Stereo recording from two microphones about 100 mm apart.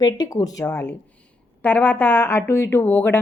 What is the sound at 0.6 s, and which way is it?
A woman's voice, 20° left (ahead or behind).